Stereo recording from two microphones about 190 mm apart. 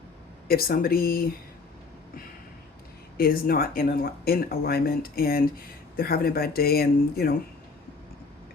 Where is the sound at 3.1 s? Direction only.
50° left (ahead or behind).